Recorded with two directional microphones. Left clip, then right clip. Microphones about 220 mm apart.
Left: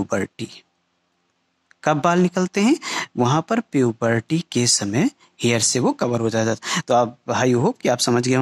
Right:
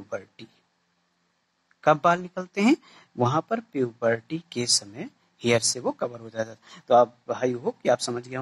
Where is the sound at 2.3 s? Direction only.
40° left (ahead or behind).